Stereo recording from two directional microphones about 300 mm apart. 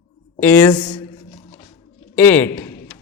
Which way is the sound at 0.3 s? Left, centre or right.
Centre.